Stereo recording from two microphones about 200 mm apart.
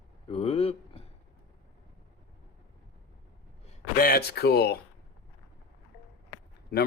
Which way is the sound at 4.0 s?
50° left (ahead or behind).